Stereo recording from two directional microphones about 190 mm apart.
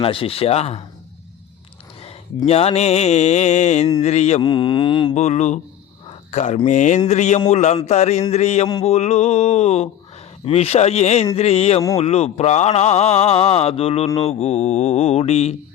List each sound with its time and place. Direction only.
0.0 s speech: 30° left (ahead or behind)
2.0 s speech: 30° left (ahead or behind)
4.4 s mantra: 25° left (ahead or behind)
5.1 s speech: 35° left (ahead or behind)
6.1 s cricket: 35° left (ahead or behind)
6.7 s speech: 40° left (ahead or behind)